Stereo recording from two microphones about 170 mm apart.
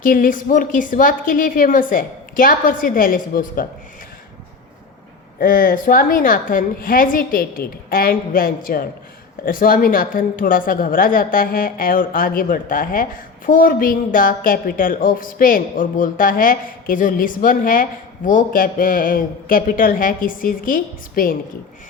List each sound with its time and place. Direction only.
0.0 s a woman's voice: 55° left (ahead or behind)
5.4 s a woman's voice: 55° left (ahead or behind)